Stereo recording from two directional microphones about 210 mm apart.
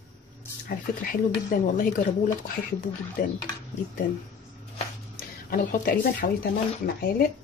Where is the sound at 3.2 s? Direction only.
40° left (ahead or behind).